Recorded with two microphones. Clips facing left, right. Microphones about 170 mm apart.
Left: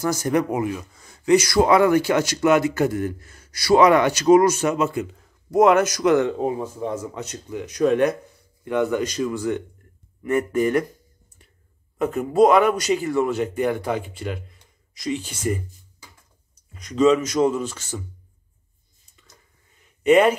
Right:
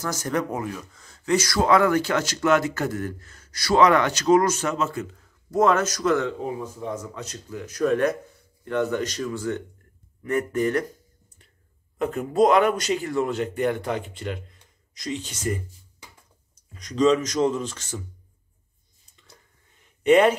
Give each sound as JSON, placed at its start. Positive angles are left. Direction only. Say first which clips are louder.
{"t": 0.0, "sound": "speech", "louder": "left 5 dB", "side_deg": 10}
{"t": 12.0, "sound": "speech", "louder": "left 3 dB", "side_deg": 5}
{"t": 16.7, "sound": "speech", "louder": "left 2 dB", "side_deg": 5}
{"t": 20.0, "sound": "speech", "louder": "left 1 dB", "side_deg": 5}